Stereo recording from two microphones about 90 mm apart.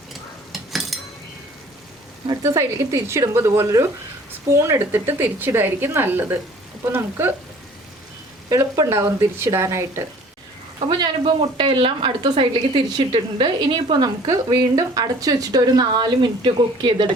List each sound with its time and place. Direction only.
0.1 s stir: centre (ahead or behind)
2.6 s a woman's voice: 35° right (ahead or behind)
8.4 s speech: 40° right (ahead or behind)
10.8 s a woman's voice: 55° right (ahead or behind)
14.5 s speech: 40° right (ahead or behind); by 17.1 s 60° right (ahead or behind)